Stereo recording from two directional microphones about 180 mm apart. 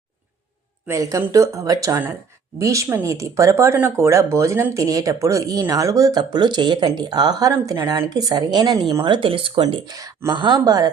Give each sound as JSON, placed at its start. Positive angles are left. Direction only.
{"t": 0.9, "sound": "speech", "side_deg": -15}